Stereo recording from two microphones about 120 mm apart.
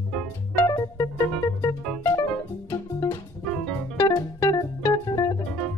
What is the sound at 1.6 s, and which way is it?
Music, 25° left (ahead or behind).